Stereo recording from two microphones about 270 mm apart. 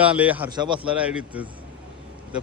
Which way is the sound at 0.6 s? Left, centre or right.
Centre.